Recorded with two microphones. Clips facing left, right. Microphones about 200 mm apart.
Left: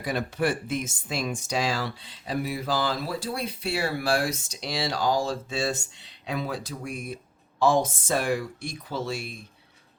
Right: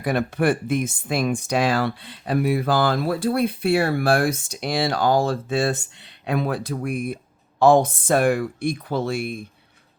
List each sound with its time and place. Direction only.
0.0 s speech: 60° right (ahead or behind)